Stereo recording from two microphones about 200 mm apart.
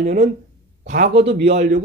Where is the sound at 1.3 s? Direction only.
60° right (ahead or behind).